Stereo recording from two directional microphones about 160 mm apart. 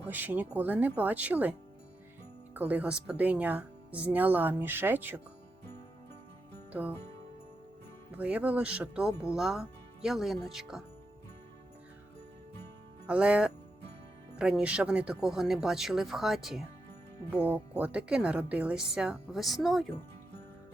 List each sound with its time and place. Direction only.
0.1 s speech: 10° right (ahead or behind)
2.6 s speech: 10° right (ahead or behind)
8.1 s speech: 10° right (ahead or behind)
13.1 s speech: 5° right (ahead or behind)